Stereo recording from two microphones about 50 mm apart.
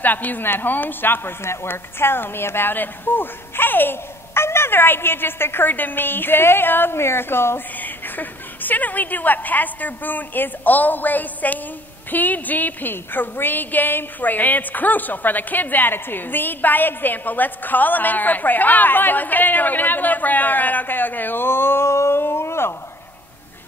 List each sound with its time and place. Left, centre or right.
0.0 s a woman's voice: left
7.8 s a woman's voice: left
22.2 s speech: left